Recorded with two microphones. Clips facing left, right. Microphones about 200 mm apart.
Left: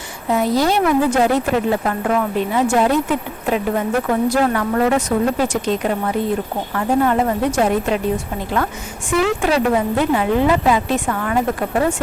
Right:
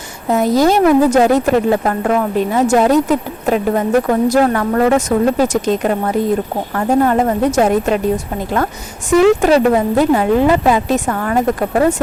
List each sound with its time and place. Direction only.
0.3 s a woman's voice: 45° right (ahead or behind)
9.0 s a woman's voice: 40° right (ahead or behind)